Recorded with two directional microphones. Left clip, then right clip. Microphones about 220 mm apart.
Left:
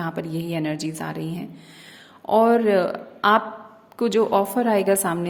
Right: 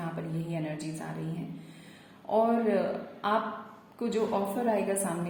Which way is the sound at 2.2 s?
50° left (ahead or behind).